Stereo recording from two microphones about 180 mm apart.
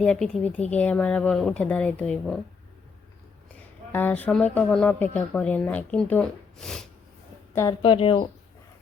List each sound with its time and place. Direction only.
0.0 s speech: 5° left (ahead or behind)
3.9 s speech: 10° left (ahead or behind)
7.5 s a woman's voice: 15° left (ahead or behind)
7.8 s speech: 30° left (ahead or behind)